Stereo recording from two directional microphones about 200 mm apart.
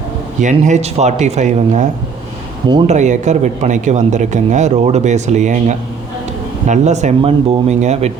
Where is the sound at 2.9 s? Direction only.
35° right (ahead or behind).